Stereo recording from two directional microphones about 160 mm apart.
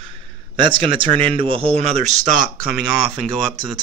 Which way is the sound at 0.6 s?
30° right (ahead or behind).